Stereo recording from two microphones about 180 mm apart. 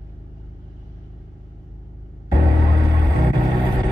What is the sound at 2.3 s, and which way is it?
Music, 20° right (ahead or behind).